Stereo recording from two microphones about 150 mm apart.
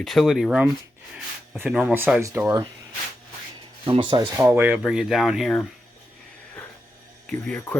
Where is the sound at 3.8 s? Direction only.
35° right (ahead or behind).